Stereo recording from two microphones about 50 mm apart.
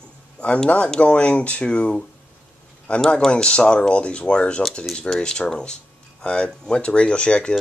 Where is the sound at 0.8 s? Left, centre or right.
Centre.